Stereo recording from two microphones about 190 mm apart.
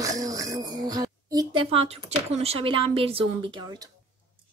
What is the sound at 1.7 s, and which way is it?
Speech, 30° right (ahead or behind).